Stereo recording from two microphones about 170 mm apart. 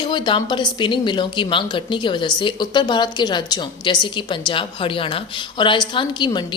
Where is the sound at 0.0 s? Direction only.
25° left (ahead or behind).